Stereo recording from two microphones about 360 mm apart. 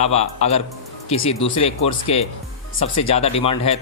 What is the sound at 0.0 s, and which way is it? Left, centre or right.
Speech, centre.